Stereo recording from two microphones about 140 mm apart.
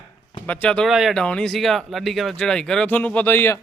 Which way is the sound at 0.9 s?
Centre (ahead or behind).